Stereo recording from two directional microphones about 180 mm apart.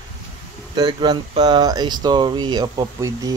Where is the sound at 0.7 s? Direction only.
25° right (ahead or behind).